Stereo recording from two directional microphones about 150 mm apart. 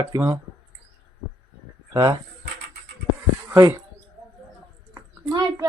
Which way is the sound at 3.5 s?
20° right (ahead or behind).